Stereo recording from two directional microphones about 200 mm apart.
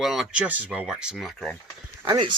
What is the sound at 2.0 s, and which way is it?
Speech, 20° right (ahead or behind).